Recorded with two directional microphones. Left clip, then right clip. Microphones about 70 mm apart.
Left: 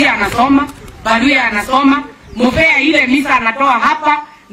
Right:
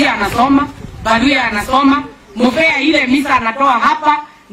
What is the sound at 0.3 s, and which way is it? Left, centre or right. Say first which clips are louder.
A woman's voice: even; centre.